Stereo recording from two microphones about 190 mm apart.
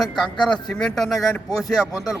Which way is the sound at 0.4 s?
5° left (ahead or behind).